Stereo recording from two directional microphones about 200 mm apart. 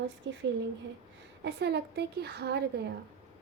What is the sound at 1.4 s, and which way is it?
A woman's voice, 55° right (ahead or behind).